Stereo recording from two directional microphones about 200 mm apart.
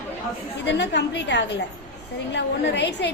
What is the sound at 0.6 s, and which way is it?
A woman's voice, 60° left (ahead or behind).